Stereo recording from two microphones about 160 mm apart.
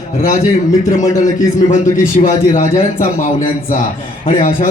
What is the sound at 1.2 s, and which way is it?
A man's voice, 50° left (ahead or behind).